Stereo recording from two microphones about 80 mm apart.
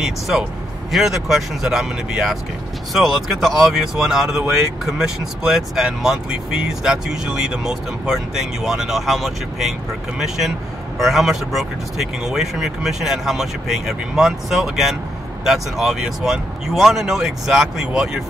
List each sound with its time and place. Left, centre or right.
0.0 s speech: centre